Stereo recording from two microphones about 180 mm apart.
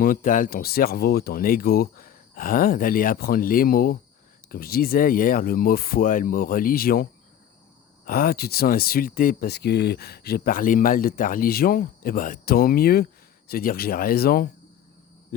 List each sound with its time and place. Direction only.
0.0 s speech: 50° left (ahead or behind)